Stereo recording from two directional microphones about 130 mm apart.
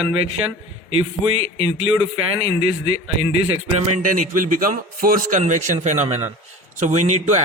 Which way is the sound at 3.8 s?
75° right (ahead or behind).